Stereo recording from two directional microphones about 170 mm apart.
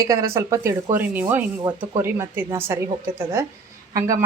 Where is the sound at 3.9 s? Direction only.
20° right (ahead or behind).